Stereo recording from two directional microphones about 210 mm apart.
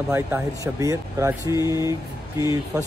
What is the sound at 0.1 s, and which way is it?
Speech, 15° right (ahead or behind).